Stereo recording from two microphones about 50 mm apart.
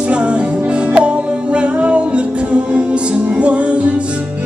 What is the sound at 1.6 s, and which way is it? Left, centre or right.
Music, right.